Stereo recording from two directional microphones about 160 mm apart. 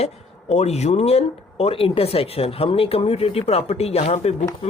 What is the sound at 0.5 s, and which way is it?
Speech, 45° left (ahead or behind).